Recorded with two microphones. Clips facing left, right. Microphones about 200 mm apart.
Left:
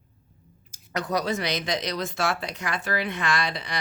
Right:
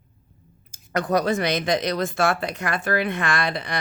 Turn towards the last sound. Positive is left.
turn(degrees=-55)  # may be behind; listen again after turning